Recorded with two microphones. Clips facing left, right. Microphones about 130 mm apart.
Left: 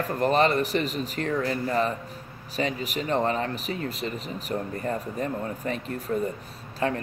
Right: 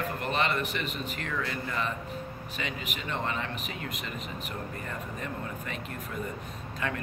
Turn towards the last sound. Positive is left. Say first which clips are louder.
# left 6 dB
turn(degrees=35)  # may be behind; listen again after turning